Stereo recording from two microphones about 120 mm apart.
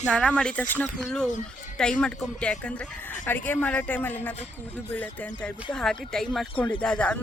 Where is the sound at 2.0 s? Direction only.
5° left (ahead or behind).